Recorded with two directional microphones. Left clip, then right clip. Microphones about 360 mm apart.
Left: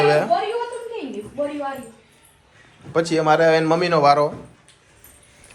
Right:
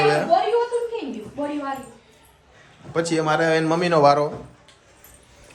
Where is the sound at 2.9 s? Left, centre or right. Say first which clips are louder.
Left 4 dB; centre.